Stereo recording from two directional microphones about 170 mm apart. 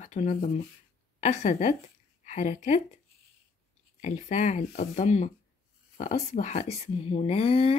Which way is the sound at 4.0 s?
40° left (ahead or behind).